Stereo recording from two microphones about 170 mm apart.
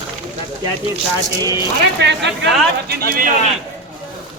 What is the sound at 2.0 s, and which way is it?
Speech, 90° right.